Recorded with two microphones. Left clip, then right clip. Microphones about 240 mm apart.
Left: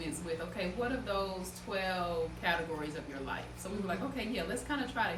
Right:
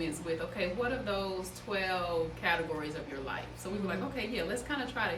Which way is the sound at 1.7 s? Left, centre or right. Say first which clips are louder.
Right 2 dB; centre.